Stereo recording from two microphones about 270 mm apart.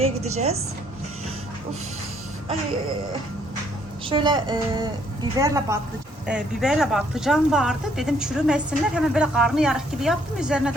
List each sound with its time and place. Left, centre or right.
0.3 s speech: right
4.1 s a woman's voice: centre